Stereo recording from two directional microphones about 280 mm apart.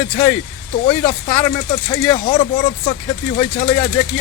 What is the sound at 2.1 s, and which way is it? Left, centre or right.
Speech, left.